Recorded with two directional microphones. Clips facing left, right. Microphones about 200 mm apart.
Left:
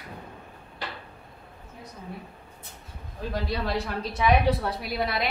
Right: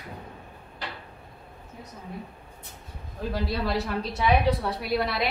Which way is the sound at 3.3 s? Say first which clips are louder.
Right 1 dB; centre (ahead or behind).